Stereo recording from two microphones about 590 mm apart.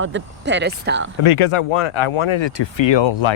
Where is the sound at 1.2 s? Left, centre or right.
Left.